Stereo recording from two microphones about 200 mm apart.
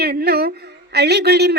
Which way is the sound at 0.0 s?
50° right (ahead or behind).